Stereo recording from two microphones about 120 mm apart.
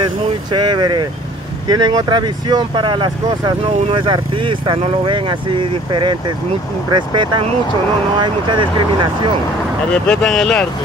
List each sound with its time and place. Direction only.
0.5 s speech: 35° right (ahead or behind)
9.9 s speech: 5° left (ahead or behind)